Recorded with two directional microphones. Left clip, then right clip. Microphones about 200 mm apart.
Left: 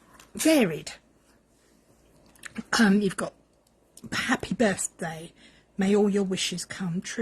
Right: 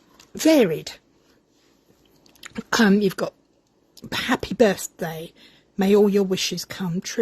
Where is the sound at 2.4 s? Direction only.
50° right (ahead or behind).